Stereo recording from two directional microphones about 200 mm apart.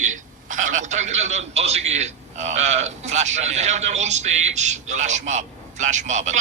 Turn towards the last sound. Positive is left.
turn(degrees=-35)  # may be behind; listen again after turning